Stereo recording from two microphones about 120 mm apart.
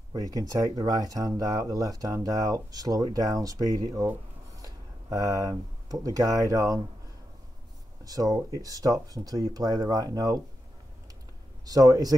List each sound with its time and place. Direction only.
0.1 s speech: 30° right (ahead or behind)
8.0 s speech: 30° right (ahead or behind)
11.6 s speech: 30° right (ahead or behind)